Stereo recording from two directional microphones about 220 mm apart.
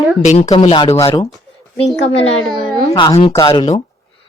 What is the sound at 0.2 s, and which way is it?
Speech, 30° left (ahead or behind).